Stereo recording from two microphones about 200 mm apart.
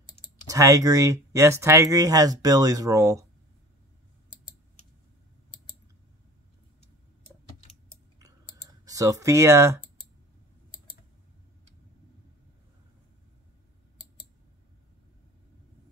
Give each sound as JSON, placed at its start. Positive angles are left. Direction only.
{"t": 0.5, "sound": "speech", "side_deg": -15}
{"t": 8.2, "sound": "clicking", "side_deg": -15}